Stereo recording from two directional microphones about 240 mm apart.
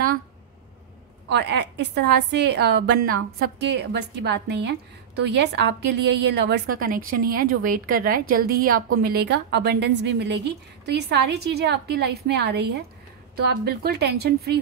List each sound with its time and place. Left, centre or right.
1.3 s a woman's voice: right